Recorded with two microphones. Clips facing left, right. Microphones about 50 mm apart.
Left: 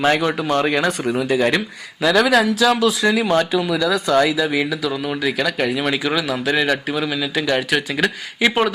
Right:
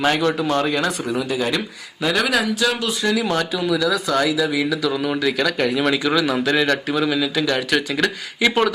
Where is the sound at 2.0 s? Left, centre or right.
Centre.